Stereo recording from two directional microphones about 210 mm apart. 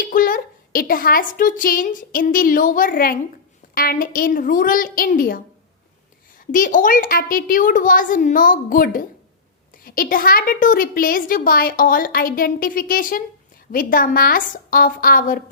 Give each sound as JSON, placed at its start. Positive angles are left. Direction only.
{"t": 0.0, "sound": "a woman's voice", "side_deg": 40}
{"t": 6.5, "sound": "a woman's voice", "side_deg": 40}